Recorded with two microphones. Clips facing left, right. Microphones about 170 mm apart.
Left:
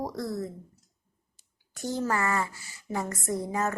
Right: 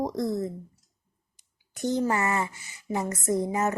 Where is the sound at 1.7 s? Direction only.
20° right (ahead or behind).